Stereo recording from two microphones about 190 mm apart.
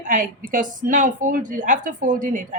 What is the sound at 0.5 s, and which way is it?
Speech, 45° right (ahead or behind).